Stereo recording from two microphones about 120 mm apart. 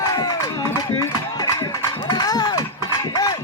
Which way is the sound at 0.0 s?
30° left (ahead or behind).